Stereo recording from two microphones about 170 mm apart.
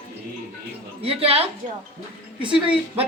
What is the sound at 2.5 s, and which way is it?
Speech, 5° right (ahead or behind).